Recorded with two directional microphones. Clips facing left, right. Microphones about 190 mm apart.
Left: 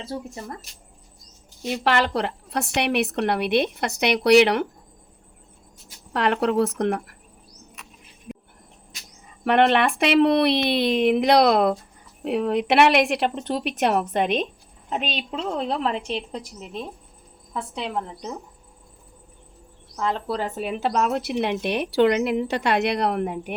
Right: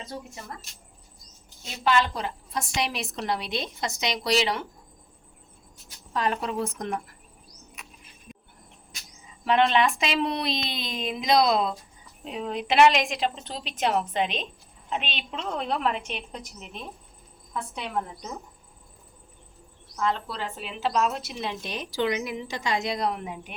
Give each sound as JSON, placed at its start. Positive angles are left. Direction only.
{"t": 0.0, "sound": "a woman's voice", "side_deg": 30}
{"t": 1.6, "sound": "speech", "side_deg": 70}
{"t": 6.1, "sound": "speech", "side_deg": 70}
{"t": 9.4, "sound": "speech", "side_deg": 60}
{"t": 14.8, "sound": "a woman's voice", "side_deg": 40}
{"t": 20.0, "sound": "speech", "side_deg": 40}